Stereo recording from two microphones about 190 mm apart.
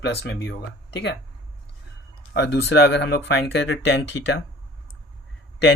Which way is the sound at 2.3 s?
65° left (ahead or behind).